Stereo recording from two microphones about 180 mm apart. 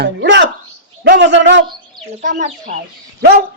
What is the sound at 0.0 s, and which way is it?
Speech, 75° right (ahead or behind).